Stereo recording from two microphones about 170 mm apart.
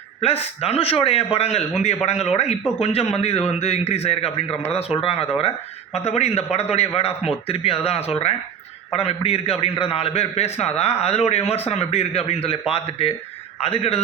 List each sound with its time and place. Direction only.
0.2 s a man's voice: 35° left (ahead or behind)